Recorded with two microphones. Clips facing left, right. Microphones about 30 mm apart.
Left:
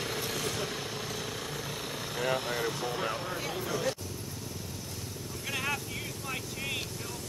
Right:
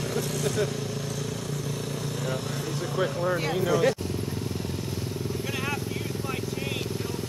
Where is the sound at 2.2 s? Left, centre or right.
Left.